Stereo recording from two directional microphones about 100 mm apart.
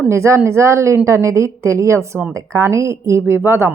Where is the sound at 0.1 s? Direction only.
30° right (ahead or behind).